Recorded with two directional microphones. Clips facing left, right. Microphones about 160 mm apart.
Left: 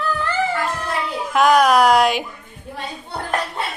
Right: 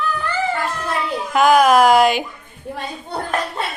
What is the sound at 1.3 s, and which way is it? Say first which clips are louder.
Speech: right 1 dB; centre (ahead or behind).